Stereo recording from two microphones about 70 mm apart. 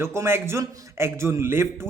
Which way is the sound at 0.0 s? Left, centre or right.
Right.